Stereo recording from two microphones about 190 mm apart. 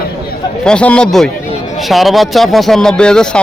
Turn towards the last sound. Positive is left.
turn(degrees=5)  # may be behind; listen again after turning